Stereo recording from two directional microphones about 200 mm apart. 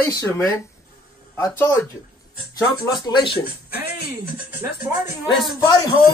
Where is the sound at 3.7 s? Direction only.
50° left (ahead or behind).